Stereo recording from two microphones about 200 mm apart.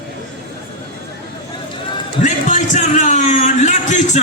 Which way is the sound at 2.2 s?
40° left (ahead or behind).